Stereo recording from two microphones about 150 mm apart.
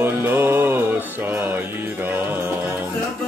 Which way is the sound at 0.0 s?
15° right (ahead or behind).